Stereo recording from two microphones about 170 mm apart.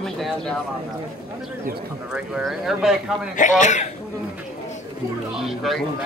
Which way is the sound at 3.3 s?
45° left (ahead or behind).